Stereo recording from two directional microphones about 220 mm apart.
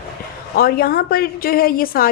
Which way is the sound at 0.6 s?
45° left (ahead or behind).